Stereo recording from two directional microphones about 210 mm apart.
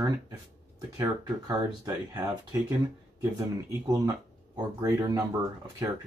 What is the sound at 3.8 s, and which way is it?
Speech, 15° right (ahead or behind).